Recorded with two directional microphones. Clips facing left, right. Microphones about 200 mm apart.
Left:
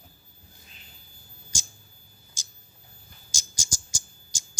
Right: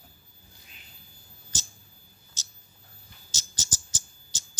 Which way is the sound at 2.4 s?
10° left (ahead or behind).